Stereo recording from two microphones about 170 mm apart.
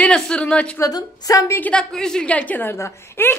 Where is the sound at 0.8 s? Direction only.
20° left (ahead or behind).